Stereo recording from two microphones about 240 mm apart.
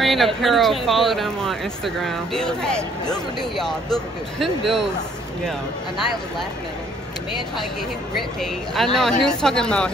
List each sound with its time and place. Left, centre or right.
0.0 s a sound: centre
0.4 s speech: centre
8.2 s speech: centre